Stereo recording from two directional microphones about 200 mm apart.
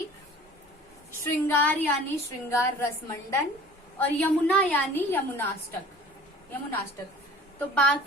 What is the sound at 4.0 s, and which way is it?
A woman's voice, 5° left (ahead or behind).